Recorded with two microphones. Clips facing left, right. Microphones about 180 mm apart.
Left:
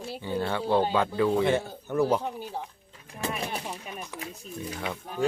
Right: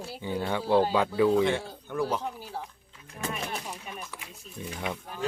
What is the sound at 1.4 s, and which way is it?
Speech, 5° left (ahead or behind).